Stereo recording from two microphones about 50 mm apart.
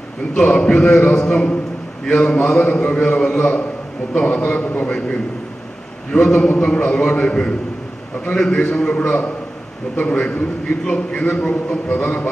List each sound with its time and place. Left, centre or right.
0.3 s a man's voice: left
3.2 s a man's voice: left
6.1 s a man's voice: left